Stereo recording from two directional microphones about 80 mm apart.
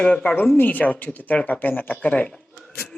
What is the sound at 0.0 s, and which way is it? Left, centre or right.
Speech, centre.